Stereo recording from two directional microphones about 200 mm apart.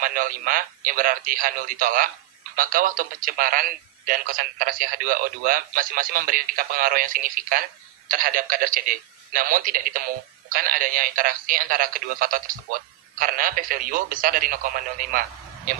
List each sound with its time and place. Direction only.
0.0 s speech: 45° right (ahead or behind)